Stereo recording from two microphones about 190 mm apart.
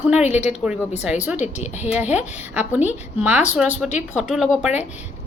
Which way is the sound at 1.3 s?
35° left (ahead or behind).